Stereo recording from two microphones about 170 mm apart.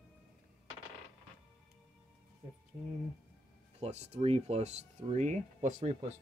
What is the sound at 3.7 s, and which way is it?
Speech, 40° right (ahead or behind).